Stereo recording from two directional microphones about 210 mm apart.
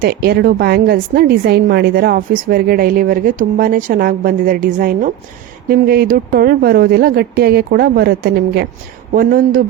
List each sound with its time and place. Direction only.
0.0 s a woman's voice: 45° right (ahead or behind)